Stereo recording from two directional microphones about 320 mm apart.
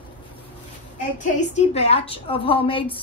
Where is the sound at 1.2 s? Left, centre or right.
Left.